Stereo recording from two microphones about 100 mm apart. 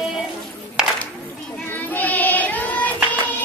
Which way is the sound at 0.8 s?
5° right (ahead or behind).